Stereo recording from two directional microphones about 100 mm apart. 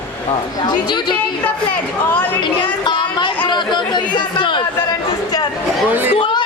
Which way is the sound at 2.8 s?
50° left (ahead or behind).